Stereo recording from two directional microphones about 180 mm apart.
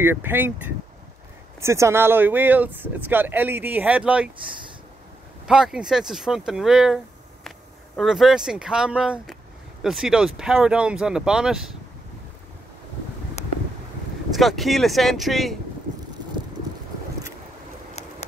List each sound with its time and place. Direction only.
0.0 s speech: 10° right (ahead or behind)
5.5 s speech: 5° right (ahead or behind)
13.4 s wind: 40° left (ahead or behind)
14.3 s speech: centre (ahead or behind)